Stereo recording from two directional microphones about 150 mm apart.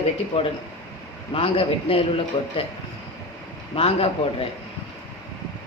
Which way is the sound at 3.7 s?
40° left (ahead or behind).